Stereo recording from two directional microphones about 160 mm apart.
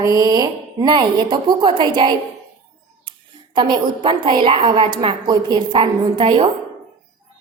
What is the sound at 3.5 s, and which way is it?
A woman's voice, 25° right (ahead or behind).